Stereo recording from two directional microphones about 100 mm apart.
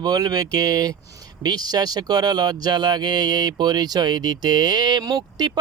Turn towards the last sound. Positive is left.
turn(degrees=-45)  # may be behind; listen again after turning